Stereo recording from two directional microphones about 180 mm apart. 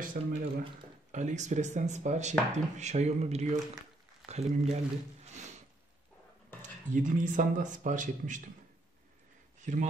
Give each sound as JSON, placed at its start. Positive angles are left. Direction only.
{"t": 0.2, "sound": "speech", "side_deg": -50}
{"t": 6.6, "sound": "speech", "side_deg": -45}
{"t": 9.6, "sound": "a sound", "side_deg": -45}